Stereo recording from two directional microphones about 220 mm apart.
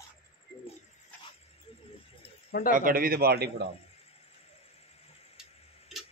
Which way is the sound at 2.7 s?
40° right (ahead or behind).